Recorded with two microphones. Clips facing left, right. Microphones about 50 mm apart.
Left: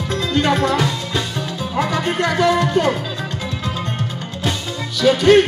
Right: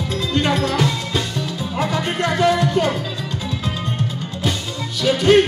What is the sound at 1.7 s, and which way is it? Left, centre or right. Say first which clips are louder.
Music: left 2 dB; left.